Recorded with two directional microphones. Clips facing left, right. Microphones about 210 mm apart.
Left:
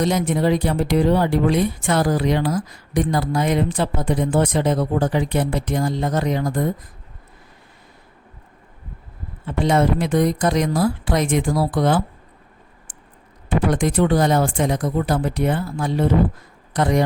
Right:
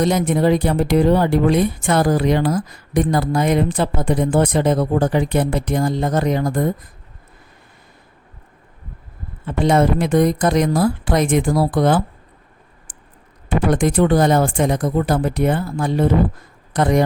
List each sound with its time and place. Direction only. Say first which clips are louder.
0.0 s speech: right 3 dB; 50° right (ahead or behind)
9.5 s speech: right 2 dB; 50° right (ahead or behind)
13.7 s speech: right 3 dB; 50° right (ahead or behind)